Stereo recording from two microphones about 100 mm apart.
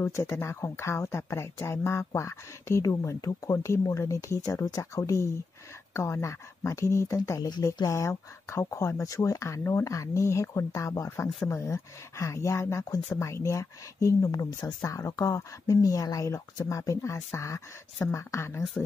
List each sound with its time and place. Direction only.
0.0 s speech: 30° left (ahead or behind)